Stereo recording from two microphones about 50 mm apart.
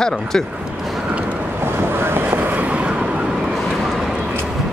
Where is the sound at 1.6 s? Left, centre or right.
Right.